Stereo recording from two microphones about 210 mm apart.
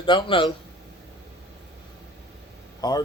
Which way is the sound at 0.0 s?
25° left (ahead or behind).